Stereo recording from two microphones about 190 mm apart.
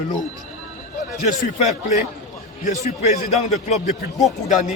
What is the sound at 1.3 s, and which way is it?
A man's voice, 40° left (ahead or behind).